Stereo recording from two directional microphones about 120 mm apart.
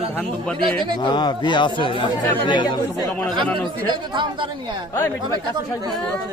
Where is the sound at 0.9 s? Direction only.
35° left (ahead or behind).